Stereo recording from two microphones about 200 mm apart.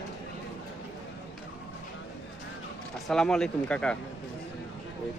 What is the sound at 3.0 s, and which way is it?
Speech, 5° left (ahead or behind).